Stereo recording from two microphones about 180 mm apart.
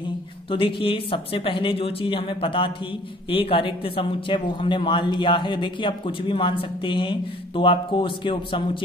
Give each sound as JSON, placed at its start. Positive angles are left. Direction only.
{"t": 0.5, "sound": "speech", "side_deg": 30}